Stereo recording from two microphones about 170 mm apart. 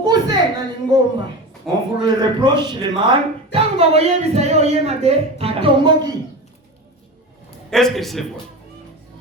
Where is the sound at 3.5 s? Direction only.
35° right (ahead or behind).